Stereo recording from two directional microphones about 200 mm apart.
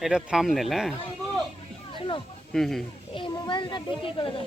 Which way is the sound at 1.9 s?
25° left (ahead or behind).